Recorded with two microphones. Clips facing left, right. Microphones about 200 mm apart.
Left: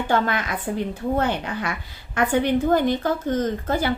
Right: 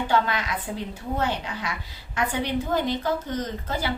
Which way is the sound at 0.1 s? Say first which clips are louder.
Left 3 dB; 50° left (ahead or behind).